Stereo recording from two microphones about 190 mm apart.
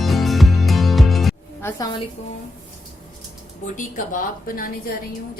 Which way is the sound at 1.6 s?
15° left (ahead or behind).